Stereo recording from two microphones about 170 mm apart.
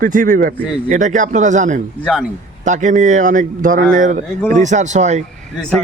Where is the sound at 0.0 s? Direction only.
50° right (ahead or behind).